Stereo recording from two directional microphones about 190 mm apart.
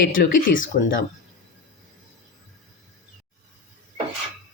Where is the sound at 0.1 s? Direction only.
45° left (ahead or behind).